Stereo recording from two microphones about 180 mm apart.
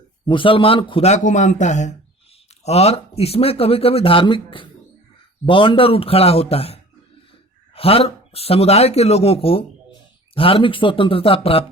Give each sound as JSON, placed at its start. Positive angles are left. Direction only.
{"t": 0.3, "sound": "speech", "side_deg": 30}
{"t": 7.8, "sound": "speech", "side_deg": 35}